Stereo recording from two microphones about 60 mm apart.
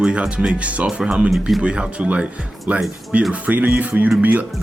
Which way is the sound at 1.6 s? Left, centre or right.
Centre.